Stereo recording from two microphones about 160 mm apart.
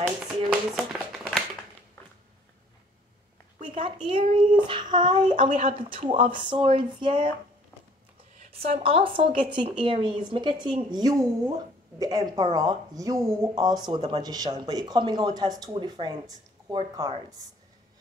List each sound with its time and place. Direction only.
0.5 s a sound: centre (ahead or behind)
3.7 s speech: 35° right (ahead or behind)
5.3 s speech: 50° right (ahead or behind); by 7.2 s 35° right (ahead or behind)
8.5 s speech: 40° right (ahead or behind); by 17.1 s 25° right (ahead or behind)